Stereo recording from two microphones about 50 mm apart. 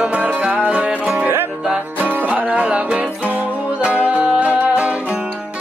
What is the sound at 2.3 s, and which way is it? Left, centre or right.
Music, right.